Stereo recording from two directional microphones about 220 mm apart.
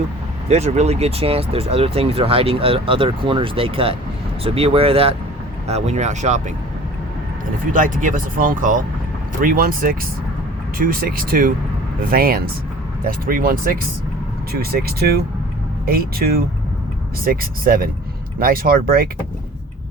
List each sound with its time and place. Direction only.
0.4 s speech: 30° right (ahead or behind)
7.7 s speech: 35° right (ahead or behind)